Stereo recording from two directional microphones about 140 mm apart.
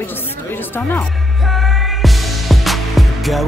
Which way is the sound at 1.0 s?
Centre (ahead or behind).